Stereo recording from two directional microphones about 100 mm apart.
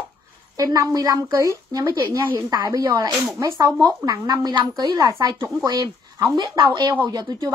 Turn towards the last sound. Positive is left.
turn(degrees=-40)  # may be behind; listen again after turning